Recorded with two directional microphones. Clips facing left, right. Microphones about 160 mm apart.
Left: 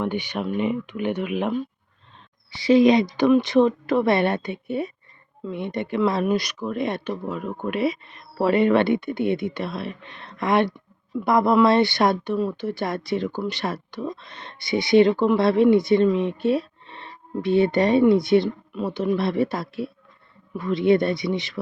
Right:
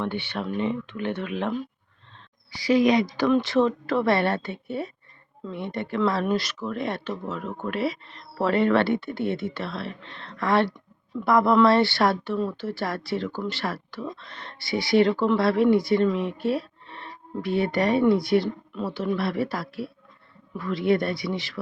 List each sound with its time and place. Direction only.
0.0 s speech: 15° left (ahead or behind)
2.5 s speech: 25° left (ahead or behind)